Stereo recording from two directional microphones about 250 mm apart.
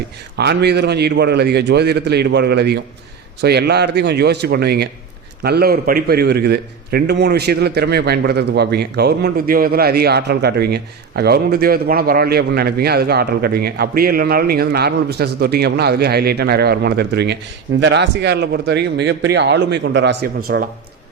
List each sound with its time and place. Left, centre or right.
0.3 s a man's voice: right